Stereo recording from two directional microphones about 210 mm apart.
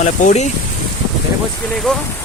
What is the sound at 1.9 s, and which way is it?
Speech, 5° left (ahead or behind).